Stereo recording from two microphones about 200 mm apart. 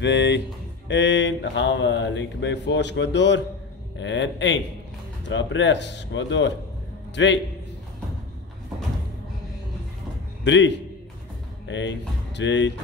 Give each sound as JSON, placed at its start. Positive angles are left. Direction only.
{"t": 0.0, "sound": "a man's voice", "side_deg": 60}
{"t": 10.4, "sound": "speech", "side_deg": 65}